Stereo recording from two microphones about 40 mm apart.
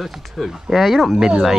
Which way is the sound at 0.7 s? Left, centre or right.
Centre.